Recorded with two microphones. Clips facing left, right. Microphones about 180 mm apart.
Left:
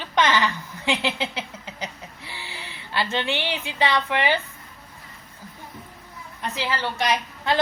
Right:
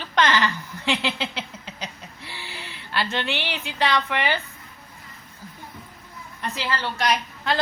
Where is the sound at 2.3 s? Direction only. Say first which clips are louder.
Right 1 dB; 15° left (ahead or behind).